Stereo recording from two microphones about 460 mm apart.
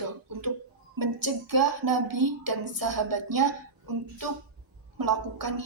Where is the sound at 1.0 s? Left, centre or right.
Right.